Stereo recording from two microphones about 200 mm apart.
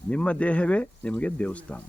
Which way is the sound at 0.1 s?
5° left (ahead or behind).